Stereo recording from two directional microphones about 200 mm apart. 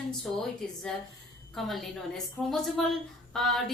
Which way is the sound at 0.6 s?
5° left (ahead or behind).